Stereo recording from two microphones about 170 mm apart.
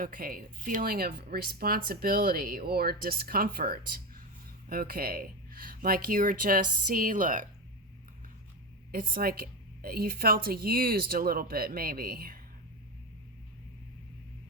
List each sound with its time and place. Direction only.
0.0 s speech: 55° right (ahead or behind)
8.9 s speech: 60° right (ahead or behind)